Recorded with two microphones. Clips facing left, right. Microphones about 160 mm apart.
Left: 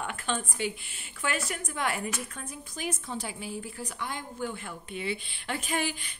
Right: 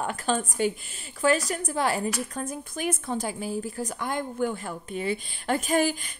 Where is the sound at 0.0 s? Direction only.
40° right (ahead or behind).